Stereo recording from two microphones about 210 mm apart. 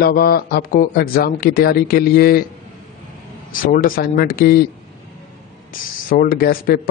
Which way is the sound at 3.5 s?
40° left (ahead or behind).